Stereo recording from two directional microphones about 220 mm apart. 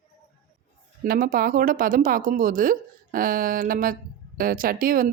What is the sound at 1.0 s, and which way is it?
Speech, 40° right (ahead or behind).